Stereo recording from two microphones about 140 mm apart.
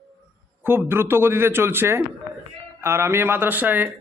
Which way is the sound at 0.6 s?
15° right (ahead or behind).